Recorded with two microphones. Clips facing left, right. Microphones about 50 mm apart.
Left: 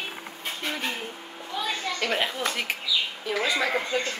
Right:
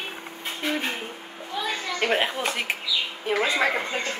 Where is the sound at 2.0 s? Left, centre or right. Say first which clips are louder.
Right 4 dB; right.